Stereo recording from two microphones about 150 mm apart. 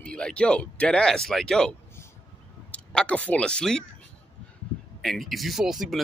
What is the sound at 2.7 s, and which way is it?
Speech, 10° left (ahead or behind).